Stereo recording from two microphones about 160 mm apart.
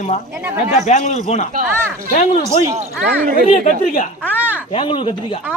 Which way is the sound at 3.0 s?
60° right (ahead or behind).